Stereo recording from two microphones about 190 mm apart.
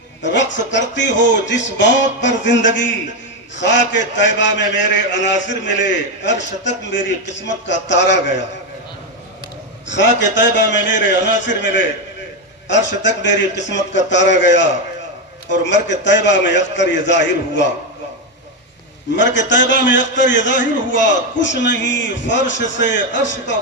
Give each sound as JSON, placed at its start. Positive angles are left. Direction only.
{"t": 0.2, "sound": "a man's voice", "side_deg": 70}
{"t": 9.9, "sound": "a man's voice", "side_deg": 70}
{"t": 19.1, "sound": "a man's voice", "side_deg": 70}